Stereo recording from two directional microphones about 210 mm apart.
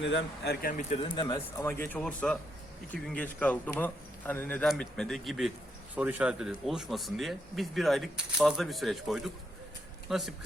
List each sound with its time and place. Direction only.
0.0 s a man's voice: 55° left (ahead or behind); by 1.7 s 20° left (ahead or behind)
1.8 s a man's voice: 5° left (ahead or behind)